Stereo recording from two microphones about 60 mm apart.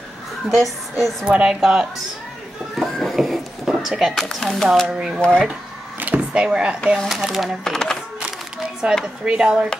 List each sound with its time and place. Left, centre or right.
0.6 s speech: centre
1.2 s speech: centre
2.8 s a sound: centre
4.1 s speech: centre
4.8 s speech: centre
5.2 s speech: centre
5.9 s a sound: right
6.3 s speech: centre
7.6 s speech: centre
9.0 s speech: centre